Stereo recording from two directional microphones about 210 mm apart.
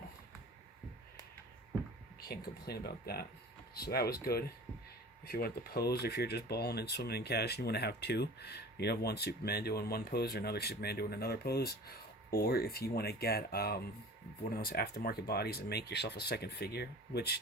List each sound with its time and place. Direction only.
2.2 s speech: 50° left (ahead or behind)